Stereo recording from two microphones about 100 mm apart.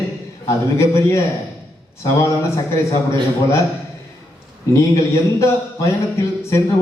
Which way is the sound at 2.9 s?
30° left (ahead or behind).